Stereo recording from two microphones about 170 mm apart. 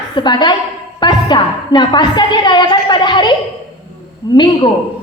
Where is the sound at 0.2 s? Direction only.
25° left (ahead or behind).